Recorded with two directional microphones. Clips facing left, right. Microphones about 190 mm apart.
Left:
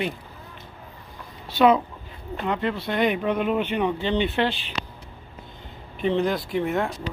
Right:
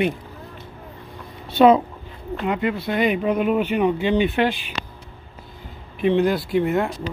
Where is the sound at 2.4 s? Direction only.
10° right (ahead or behind).